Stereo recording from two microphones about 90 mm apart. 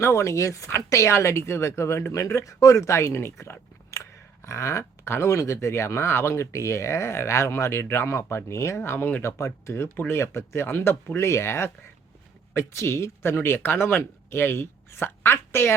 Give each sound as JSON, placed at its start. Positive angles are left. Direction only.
{"t": 0.0, "sound": "speech", "side_deg": 30}
{"t": 9.2, "sound": "speech", "side_deg": 35}
{"t": 9.9, "sound": "speech", "side_deg": 20}
{"t": 10.2, "sound": "speech", "side_deg": 30}